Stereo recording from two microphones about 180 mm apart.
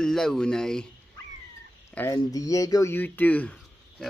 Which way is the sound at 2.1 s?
20° left (ahead or behind).